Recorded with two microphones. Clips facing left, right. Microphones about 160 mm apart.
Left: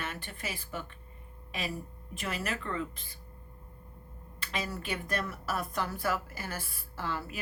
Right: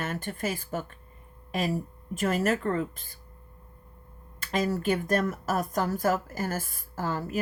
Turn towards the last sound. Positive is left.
turn(degrees=-45)  # may be behind; listen again after turning